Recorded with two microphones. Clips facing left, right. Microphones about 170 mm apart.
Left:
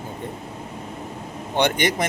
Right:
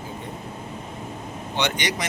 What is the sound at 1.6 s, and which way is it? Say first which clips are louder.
Speech: left 6 dB; 50° left (ahead or behind).